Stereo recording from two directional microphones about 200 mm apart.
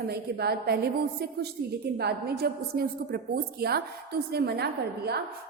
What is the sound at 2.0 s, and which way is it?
A woman's voice, 50° right (ahead or behind).